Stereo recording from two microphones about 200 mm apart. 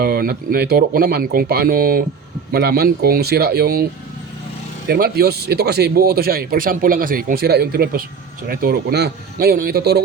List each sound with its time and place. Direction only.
0.0 s speech: 50° right (ahead or behind)
4.9 s speech: 50° right (ahead or behind)